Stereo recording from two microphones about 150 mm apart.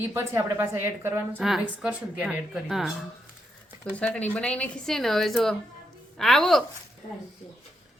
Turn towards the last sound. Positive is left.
turn(degrees=0)  # may be behind; listen again after turning